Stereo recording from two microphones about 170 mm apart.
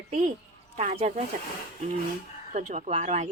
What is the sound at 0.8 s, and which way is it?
Speech, 40° right (ahead or behind).